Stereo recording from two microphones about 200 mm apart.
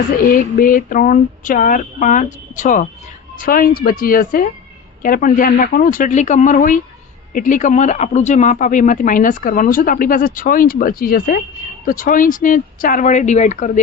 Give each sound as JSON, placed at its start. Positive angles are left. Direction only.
{"t": 0.3, "sound": "speech", "side_deg": 45}